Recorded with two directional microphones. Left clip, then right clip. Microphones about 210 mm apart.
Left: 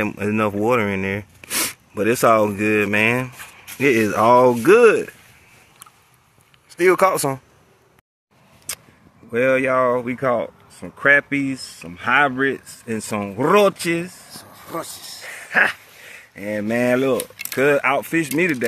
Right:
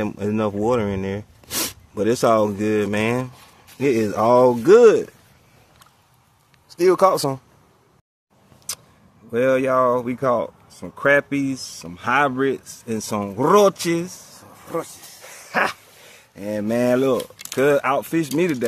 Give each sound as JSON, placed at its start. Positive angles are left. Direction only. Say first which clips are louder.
{"t": 0.0, "sound": "speech", "louder": "left 2 dB", "side_deg": 0}
{"t": 6.7, "sound": "speech", "louder": "even", "side_deg": 0}
{"t": 9.3, "sound": "speech", "louder": "left 1 dB", "side_deg": -5}
{"t": 14.3, "sound": "a sound", "louder": "right 3 dB", "side_deg": -40}
{"t": 15.6, "sound": "speech", "louder": "left 4 dB", "side_deg": -10}